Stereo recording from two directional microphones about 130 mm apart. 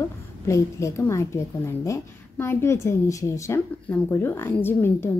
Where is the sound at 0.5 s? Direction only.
25° left (ahead or behind).